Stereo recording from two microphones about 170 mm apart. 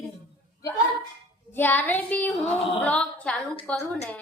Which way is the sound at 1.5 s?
10° left (ahead or behind).